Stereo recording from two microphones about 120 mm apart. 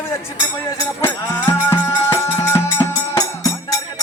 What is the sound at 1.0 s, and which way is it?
Music, 20° left (ahead or behind).